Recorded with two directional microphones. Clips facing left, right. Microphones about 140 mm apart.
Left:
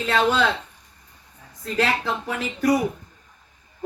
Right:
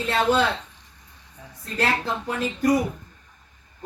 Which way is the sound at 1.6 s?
90° left.